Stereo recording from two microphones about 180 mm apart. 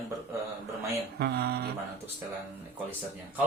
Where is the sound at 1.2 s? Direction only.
65° right (ahead or behind).